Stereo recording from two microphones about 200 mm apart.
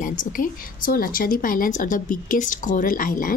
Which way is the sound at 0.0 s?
40° left (ahead or behind).